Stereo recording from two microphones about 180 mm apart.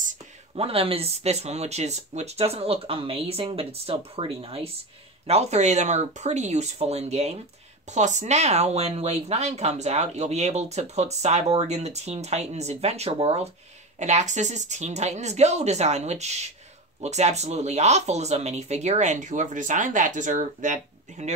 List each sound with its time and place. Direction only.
0.0 s speech: 40° right (ahead or behind)